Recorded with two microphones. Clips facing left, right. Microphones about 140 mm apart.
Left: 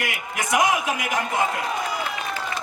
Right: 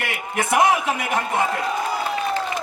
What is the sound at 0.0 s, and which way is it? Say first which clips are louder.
Speech: right 3 dB; 30° right (ahead or behind).